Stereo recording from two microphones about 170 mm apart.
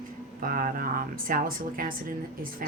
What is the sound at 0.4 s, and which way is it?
Speech, 55° right (ahead or behind).